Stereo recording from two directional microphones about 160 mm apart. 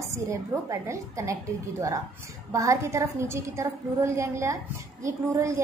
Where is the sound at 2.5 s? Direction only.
20° right (ahead or behind).